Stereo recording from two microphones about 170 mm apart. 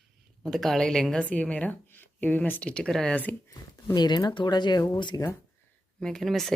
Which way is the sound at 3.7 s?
25° left (ahead or behind).